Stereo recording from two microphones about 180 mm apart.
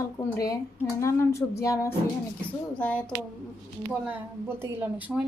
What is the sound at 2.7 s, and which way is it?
Speech, 5° left (ahead or behind).